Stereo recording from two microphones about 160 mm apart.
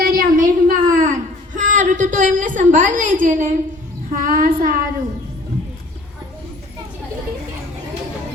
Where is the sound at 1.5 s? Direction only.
50° right (ahead or behind).